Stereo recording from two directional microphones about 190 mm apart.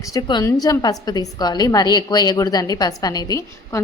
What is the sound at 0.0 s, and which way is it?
A woman's voice, 20° left (ahead or behind).